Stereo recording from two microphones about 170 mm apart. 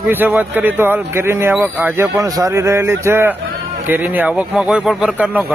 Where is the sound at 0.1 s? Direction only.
10° right (ahead or behind).